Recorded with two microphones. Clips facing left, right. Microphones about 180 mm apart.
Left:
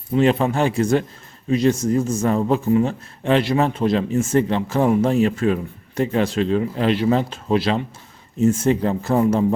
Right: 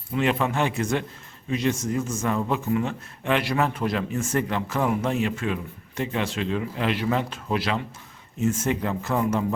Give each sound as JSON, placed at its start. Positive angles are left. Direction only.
{"t": 0.1, "sound": "a man's voice", "side_deg": 35}